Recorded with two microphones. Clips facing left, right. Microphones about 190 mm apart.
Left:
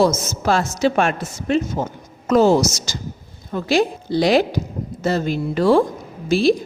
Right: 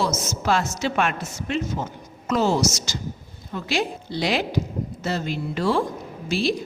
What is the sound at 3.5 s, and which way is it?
A woman's voice, 45° left (ahead or behind).